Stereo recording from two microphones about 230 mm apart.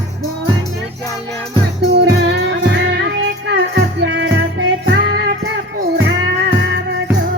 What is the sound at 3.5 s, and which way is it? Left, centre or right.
Music, right.